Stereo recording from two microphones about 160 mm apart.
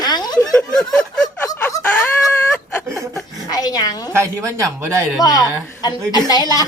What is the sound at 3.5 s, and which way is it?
Speech, 25° left (ahead or behind).